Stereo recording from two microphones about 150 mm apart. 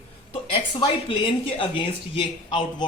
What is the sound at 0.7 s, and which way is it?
A man's voice, 35° left (ahead or behind).